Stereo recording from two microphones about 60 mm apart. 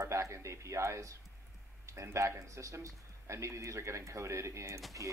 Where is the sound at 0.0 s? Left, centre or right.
Right.